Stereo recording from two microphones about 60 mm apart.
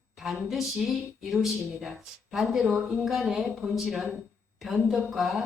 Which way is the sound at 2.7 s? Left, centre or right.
Right.